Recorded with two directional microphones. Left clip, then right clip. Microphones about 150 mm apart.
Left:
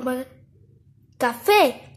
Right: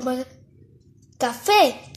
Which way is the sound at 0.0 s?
Centre (ahead or behind).